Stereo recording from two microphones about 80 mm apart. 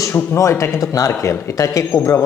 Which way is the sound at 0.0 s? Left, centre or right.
Left.